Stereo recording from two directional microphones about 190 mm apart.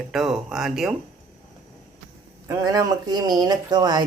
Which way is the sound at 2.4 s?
15° right (ahead or behind).